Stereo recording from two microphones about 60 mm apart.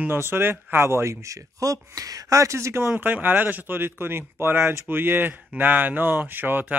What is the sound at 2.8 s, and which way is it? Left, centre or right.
Speech, right.